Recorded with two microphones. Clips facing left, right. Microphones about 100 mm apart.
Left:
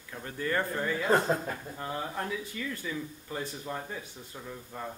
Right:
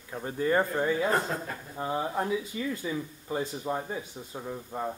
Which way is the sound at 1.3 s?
25° left (ahead or behind).